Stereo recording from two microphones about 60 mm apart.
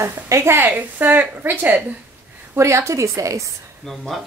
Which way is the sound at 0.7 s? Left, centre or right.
Right.